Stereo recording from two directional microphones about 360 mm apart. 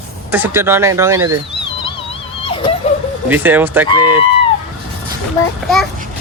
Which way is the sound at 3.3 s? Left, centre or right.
Centre.